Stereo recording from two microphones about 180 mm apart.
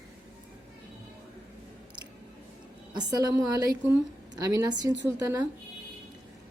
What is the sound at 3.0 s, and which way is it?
A woman's voice, 20° right (ahead or behind).